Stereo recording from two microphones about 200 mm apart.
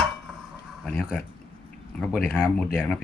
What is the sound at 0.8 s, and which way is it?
Speech, 5° left (ahead or behind).